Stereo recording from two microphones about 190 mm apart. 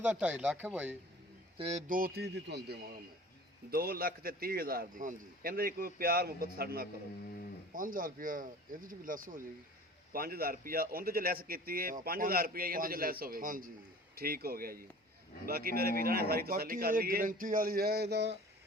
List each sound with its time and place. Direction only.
0.0 s speech: 10° right (ahead or behind)
1.5 s speech: 30° right (ahead or behind)
1.9 s speech: 50° right (ahead or behind)
3.7 s a man's voice: 50° right (ahead or behind)